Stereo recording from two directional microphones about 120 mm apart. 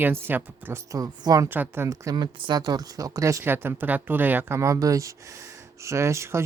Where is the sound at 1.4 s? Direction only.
15° right (ahead or behind).